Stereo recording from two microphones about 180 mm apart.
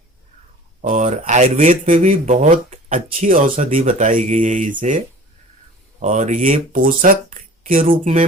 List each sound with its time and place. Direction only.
0.8 s speech: 45° right (ahead or behind)